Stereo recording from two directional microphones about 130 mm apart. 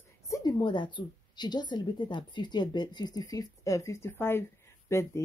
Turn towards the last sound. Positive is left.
turn(degrees=20)  # may be behind; listen again after turning